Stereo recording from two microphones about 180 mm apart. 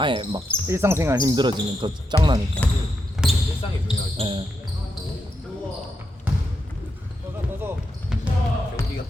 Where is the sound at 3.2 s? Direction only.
5° right (ahead or behind).